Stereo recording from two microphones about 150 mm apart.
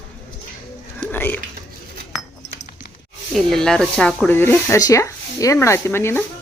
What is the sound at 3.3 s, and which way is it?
Speech, 5° left (ahead or behind).